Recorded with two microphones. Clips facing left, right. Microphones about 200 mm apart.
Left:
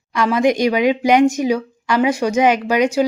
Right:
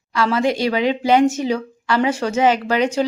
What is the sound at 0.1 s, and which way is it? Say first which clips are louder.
Speech: left 3 dB; 15° left (ahead or behind).